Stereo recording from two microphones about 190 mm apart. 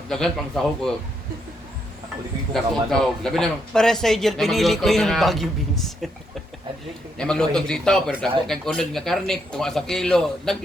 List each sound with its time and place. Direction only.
0.1 s a man's voice: centre (ahead or behind)
2.5 s a man's voice: centre (ahead or behind)
7.2 s a man's voice: 5° left (ahead or behind)